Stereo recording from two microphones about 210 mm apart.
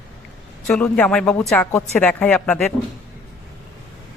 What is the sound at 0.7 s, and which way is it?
A woman's voice, 5° left (ahead or behind).